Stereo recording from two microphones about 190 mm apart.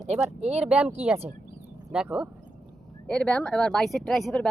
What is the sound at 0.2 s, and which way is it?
Speech, 5° right (ahead or behind).